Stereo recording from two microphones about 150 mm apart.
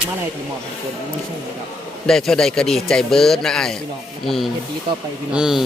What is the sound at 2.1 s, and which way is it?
Speech, 5° left (ahead or behind).